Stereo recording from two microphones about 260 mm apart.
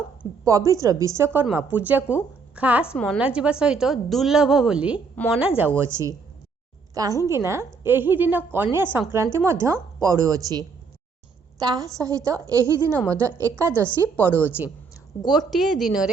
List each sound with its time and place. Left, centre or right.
0.4 s a woman's voice: centre